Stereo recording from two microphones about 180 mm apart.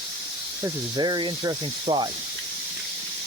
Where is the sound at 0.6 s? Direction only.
25° right (ahead or behind).